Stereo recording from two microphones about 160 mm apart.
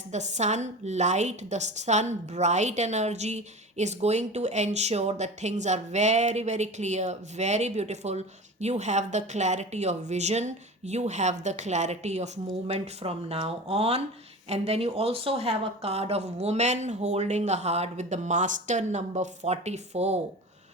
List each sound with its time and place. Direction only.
0.1 s a woman's voice: 45° right (ahead or behind)